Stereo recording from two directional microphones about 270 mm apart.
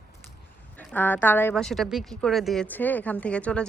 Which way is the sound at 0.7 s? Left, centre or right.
Centre.